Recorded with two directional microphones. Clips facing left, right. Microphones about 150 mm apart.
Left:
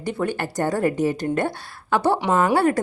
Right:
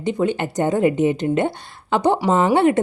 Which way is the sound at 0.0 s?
20° right (ahead or behind).